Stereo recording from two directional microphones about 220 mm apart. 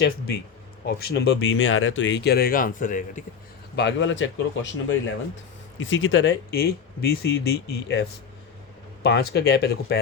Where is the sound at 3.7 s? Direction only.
55° left (ahead or behind).